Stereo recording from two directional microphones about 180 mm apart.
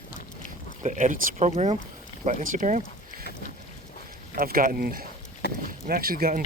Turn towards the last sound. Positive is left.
turn(degrees=-55)  # may be behind; listen again after turning